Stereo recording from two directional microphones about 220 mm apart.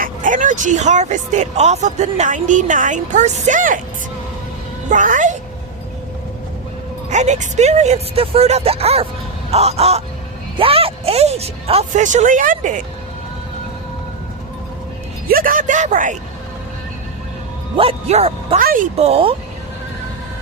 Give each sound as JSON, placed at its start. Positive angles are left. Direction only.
{"t": 0.0, "sound": "speech", "side_deg": -35}
{"t": 4.9, "sound": "speech", "side_deg": -35}
{"t": 7.1, "sound": "speech", "side_deg": -30}
{"t": 15.3, "sound": "speech", "side_deg": -40}
{"t": 17.7, "sound": "speech", "side_deg": -25}